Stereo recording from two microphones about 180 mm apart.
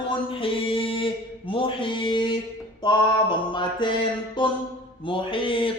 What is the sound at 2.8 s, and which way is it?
Music, 25° left (ahead or behind).